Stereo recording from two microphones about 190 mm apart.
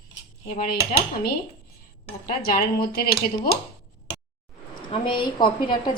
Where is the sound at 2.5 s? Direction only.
50° left (ahead or behind).